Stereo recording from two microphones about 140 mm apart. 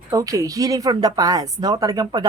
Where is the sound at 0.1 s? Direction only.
25° right (ahead or behind).